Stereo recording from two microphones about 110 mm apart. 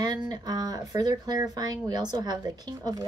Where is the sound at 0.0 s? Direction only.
40° right (ahead or behind).